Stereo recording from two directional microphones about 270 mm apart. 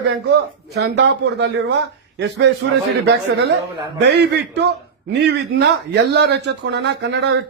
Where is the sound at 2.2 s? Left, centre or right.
Right.